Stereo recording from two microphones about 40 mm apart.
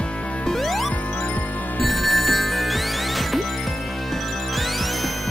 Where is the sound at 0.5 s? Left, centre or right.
Centre.